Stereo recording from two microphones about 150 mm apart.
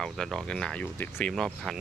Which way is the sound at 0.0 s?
5° left (ahead or behind).